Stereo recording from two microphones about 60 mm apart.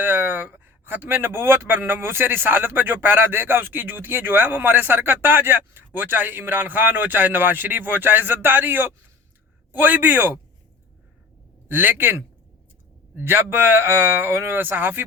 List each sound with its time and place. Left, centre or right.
0.0 s speech: right
11.7 s speech: right